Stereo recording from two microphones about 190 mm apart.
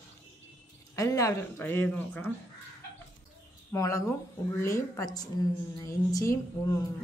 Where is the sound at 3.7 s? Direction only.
15° left (ahead or behind).